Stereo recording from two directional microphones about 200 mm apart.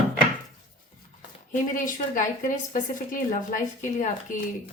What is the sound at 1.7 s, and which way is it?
Speech, 40° left (ahead or behind).